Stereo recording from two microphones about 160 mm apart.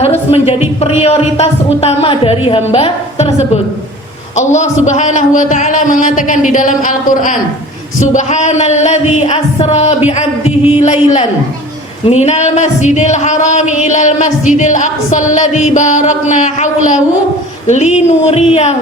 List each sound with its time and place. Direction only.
0.0 s speech: 40° left (ahead or behind)
4.4 s a man's voice: 50° left (ahead or behind)